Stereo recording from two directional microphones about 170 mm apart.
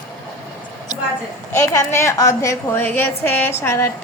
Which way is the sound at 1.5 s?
15° left (ahead or behind).